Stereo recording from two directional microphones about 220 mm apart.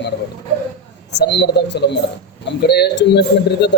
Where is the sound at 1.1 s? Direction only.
55° left (ahead or behind).